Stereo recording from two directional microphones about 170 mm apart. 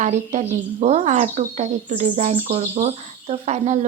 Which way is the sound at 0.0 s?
45° right (ahead or behind).